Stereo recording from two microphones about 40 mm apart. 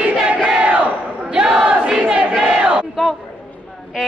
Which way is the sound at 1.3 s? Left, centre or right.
Centre.